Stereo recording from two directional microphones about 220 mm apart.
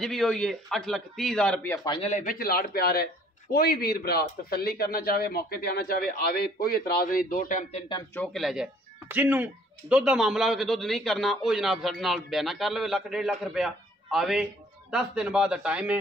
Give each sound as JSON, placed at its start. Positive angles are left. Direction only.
{"t": 0.0, "sound": "a man's voice", "side_deg": 0}
{"t": 1.9, "sound": "a man's voice", "side_deg": 30}
{"t": 7.9, "sound": "a man's voice", "side_deg": 10}